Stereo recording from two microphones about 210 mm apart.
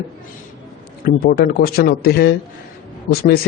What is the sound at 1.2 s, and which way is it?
A man's voice, 50° left (ahead or behind).